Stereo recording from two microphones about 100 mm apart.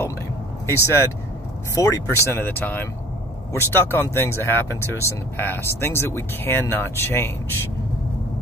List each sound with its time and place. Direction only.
0.7 s speech: 25° left (ahead or behind)